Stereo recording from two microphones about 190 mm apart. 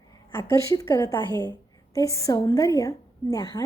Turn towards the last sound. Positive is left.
turn(degrees=20)  # may be behind; listen again after turning